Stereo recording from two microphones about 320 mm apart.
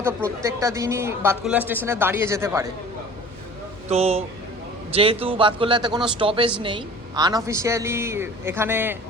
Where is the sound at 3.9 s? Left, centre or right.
Centre.